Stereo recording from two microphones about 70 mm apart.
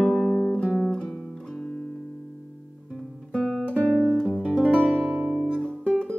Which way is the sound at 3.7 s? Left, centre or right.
Centre.